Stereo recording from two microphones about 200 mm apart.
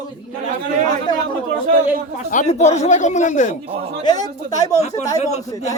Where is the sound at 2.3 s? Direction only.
35° left (ahead or behind).